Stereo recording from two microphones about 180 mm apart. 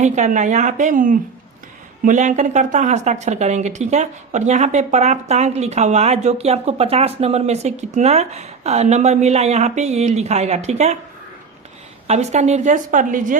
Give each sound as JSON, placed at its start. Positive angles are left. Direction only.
{"t": 0.0, "sound": "a woman's voice", "side_deg": -40}
{"t": 12.0, "sound": "a woman's voice", "side_deg": -40}